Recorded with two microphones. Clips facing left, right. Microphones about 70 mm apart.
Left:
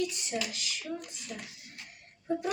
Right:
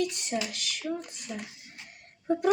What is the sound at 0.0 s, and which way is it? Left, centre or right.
Speech, right.